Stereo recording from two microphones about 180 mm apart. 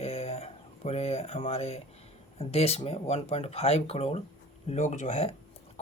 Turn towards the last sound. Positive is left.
turn(degrees=35)  # may be behind; listen again after turning